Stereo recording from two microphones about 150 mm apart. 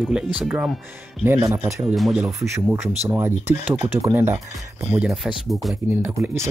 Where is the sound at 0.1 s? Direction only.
5° right (ahead or behind).